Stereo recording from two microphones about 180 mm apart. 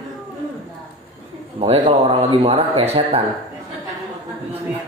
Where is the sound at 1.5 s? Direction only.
35° right (ahead or behind).